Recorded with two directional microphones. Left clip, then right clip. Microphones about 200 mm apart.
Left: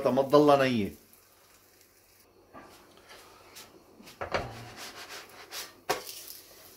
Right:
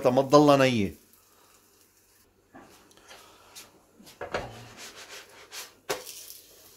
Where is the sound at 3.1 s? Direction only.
50° right (ahead or behind).